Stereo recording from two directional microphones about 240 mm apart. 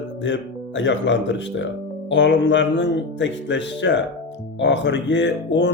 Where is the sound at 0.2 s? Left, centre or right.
Left.